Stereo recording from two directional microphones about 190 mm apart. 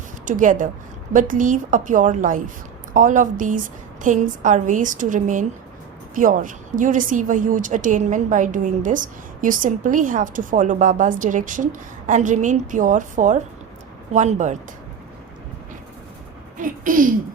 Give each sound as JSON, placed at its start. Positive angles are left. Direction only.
{"t": 0.3, "sound": "a woman's voice", "side_deg": -45}
{"t": 16.6, "sound": "speech", "side_deg": -45}